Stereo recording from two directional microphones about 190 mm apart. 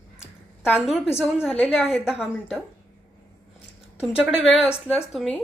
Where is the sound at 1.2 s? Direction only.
Centre (ahead or behind).